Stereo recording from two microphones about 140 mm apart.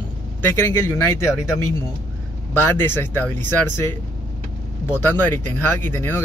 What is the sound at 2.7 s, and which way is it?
Speech, 15° left (ahead or behind).